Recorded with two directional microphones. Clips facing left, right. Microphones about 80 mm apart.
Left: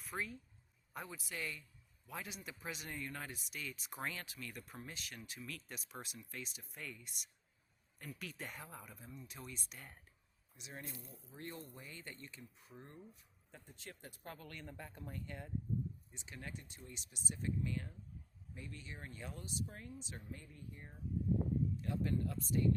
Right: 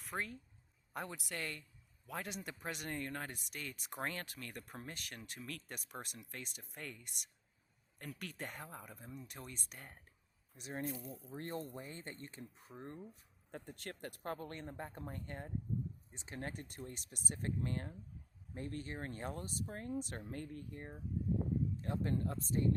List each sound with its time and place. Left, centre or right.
0.0 s speech: right
0.9 s speech: right
9.0 s speech: right
9.2 s speech: right
13.5 s speech: right
19.9 s speech: right
21.8 s speech: right